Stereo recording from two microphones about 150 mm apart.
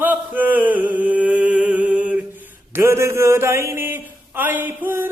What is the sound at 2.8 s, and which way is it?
Mantra, 15° right (ahead or behind).